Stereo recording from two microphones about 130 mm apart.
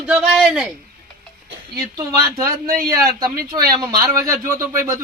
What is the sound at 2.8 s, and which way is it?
Speech, 25° right (ahead or behind).